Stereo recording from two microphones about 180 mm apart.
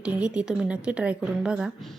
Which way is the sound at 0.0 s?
5° right (ahead or behind).